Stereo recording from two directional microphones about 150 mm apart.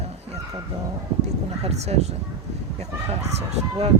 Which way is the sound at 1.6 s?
45° right (ahead or behind).